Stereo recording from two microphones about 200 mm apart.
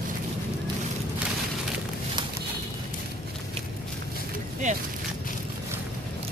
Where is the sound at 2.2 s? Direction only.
25° right (ahead or behind).